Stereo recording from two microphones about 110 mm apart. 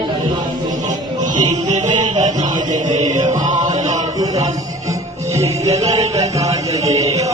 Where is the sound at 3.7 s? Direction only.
90° right.